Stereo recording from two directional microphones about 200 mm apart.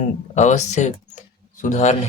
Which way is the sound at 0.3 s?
35° left (ahead or behind).